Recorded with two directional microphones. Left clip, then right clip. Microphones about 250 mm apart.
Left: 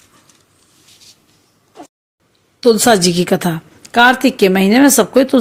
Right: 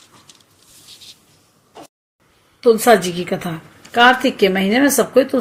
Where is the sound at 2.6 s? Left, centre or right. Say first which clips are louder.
Left 1 dB; left.